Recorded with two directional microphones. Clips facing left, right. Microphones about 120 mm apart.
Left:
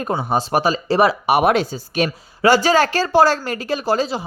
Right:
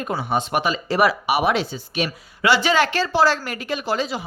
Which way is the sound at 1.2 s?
50° left (ahead or behind).